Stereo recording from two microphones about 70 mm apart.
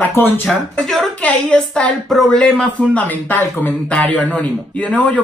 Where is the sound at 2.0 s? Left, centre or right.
Centre.